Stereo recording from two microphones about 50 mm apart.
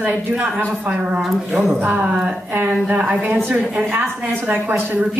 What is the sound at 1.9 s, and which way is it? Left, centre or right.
A man's voice, centre.